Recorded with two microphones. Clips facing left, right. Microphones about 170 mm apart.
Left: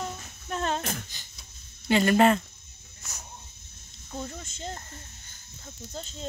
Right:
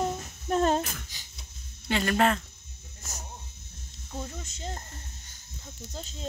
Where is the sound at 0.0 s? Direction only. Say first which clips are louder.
Right 6 dB; 35° right (ahead or behind).